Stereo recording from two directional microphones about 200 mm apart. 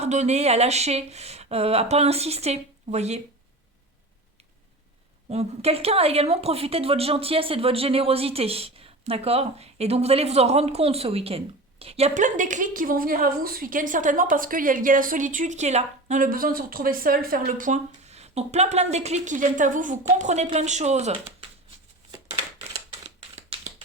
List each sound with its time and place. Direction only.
0.0 s speech: 35° right (ahead or behind)
5.3 s speech: 30° right (ahead or behind)
22.7 s crumpling: 30° right (ahead or behind)